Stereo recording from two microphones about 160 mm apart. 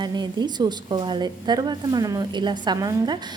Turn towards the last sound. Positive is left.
turn(degrees=-25)  # may be behind; listen again after turning